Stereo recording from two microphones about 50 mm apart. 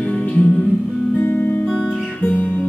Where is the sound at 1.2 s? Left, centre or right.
Left.